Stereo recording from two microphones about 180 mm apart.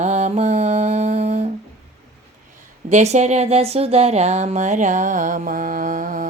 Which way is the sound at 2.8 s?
40° right (ahead or behind).